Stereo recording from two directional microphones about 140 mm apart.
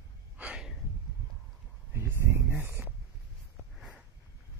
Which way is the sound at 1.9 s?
20° right (ahead or behind).